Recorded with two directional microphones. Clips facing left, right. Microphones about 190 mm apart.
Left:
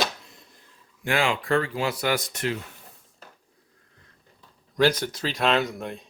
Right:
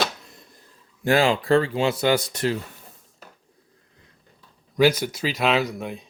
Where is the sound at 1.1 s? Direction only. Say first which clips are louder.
Right 5 dB; 35° right (ahead or behind).